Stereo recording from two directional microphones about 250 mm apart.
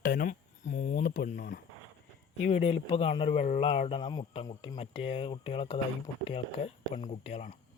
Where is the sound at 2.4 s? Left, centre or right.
Left.